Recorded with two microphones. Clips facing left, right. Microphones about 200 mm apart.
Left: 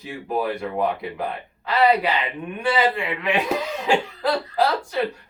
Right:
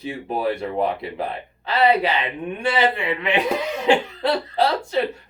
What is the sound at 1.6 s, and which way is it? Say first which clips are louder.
Speech: even; 30° right (ahead or behind).